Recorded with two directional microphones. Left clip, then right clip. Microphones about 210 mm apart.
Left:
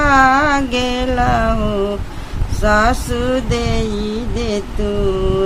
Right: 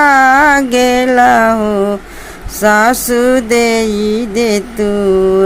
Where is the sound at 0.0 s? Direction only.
20° right (ahead or behind).